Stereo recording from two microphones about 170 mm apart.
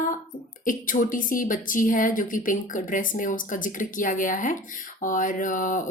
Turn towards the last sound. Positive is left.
turn(degrees=50)  # may be behind; listen again after turning